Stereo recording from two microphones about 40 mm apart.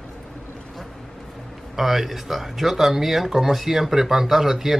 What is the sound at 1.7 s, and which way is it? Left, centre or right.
Speech, centre.